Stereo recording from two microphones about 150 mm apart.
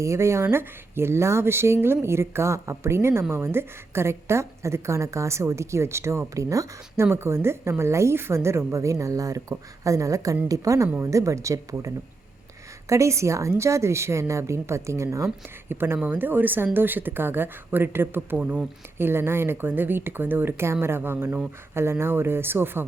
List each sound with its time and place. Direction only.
0.0 s a woman's voice: 20° right (ahead or behind)